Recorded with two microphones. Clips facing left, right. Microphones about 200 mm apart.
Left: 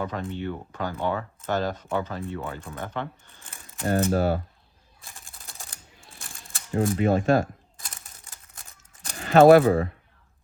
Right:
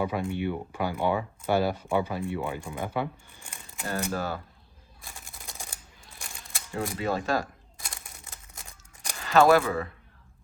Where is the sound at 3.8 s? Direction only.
40° left (ahead or behind).